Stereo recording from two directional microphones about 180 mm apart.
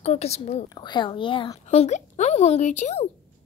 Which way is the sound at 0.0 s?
35° left (ahead or behind).